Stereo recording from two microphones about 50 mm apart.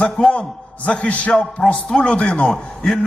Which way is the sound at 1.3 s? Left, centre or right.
Centre.